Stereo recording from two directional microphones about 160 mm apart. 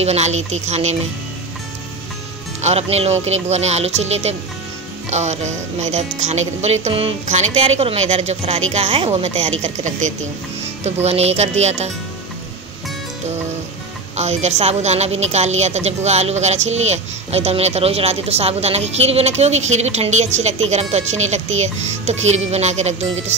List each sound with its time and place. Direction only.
0.0 s a woman's voice: 45° right (ahead or behind)
2.6 s a woman's voice: 40° right (ahead or behind)
14.1 s a woman's voice: 45° right (ahead or behind)